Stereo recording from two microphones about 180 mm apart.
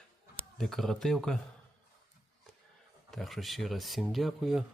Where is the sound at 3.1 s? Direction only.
Centre (ahead or behind).